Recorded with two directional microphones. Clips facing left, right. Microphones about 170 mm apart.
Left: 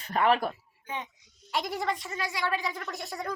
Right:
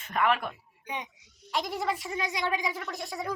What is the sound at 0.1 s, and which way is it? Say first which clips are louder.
Speech: left 2 dB; 35° left (ahead or behind).